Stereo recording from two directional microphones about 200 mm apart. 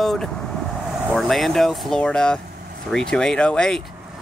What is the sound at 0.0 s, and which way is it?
Speech, centre (ahead or behind).